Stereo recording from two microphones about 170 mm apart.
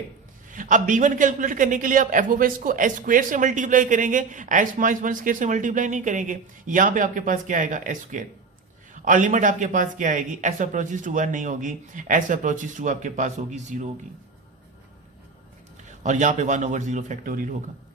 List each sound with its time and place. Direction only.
0.5 s a man's voice: 50° right (ahead or behind)
16.0 s a man's voice: 45° right (ahead or behind)